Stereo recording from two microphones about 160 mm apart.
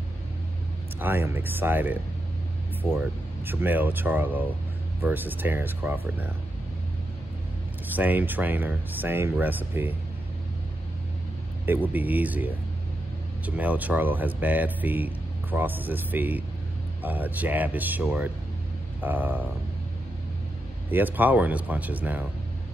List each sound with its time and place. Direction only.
0.9 s speech: 15° right (ahead or behind)
7.9 s speech: 10° right (ahead or behind)
11.6 s speech: 10° right (ahead or behind)
20.9 s speech: 10° right (ahead or behind)